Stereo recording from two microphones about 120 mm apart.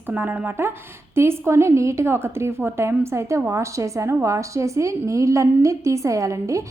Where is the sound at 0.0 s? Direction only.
15° right (ahead or behind).